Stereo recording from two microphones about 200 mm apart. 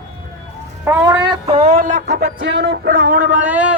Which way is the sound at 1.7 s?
40° right (ahead or behind).